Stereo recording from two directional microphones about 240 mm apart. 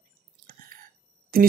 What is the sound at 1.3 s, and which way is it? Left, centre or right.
Speech, right.